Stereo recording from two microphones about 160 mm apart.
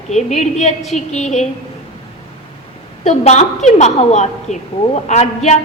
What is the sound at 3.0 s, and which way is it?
A woman's voice, 45° left (ahead or behind).